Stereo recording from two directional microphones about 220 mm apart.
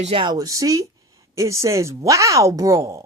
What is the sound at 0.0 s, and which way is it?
Speech, 25° right (ahead or behind).